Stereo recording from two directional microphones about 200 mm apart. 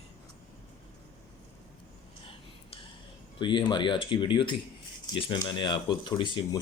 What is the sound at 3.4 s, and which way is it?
Speech, 20° left (ahead or behind).